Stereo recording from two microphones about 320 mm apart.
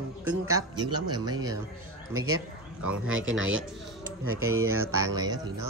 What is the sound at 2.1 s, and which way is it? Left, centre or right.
Speech, right.